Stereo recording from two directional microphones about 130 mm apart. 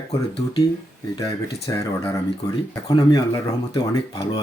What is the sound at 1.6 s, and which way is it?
Speech, 20° left (ahead or behind).